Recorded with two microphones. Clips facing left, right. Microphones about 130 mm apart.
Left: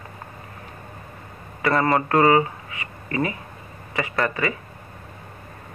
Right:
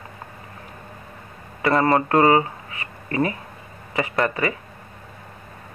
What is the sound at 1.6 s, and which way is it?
Speech, 25° right (ahead or behind).